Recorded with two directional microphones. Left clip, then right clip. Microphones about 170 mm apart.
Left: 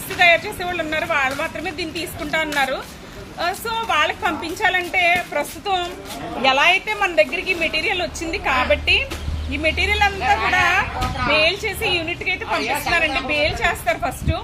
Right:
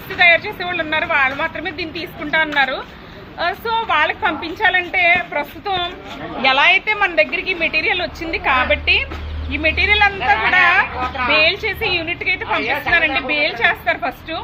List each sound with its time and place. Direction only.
0.2 s a woman's voice: 25° left (ahead or behind)